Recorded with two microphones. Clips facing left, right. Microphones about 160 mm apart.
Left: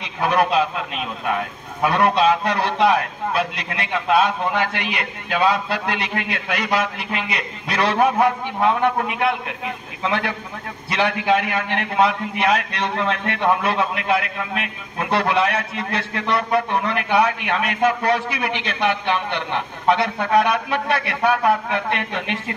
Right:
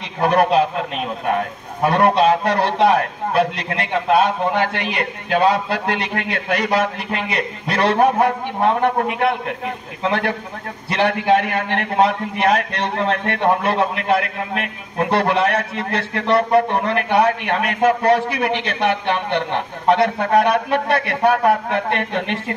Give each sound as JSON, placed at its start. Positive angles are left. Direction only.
{"t": 0.2, "sound": "a man's voice", "side_deg": -45}
{"t": 10.9, "sound": "a man's voice", "side_deg": -50}